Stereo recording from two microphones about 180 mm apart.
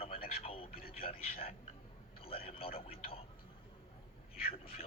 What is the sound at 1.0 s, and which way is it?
A man's voice, 35° left (ahead or behind).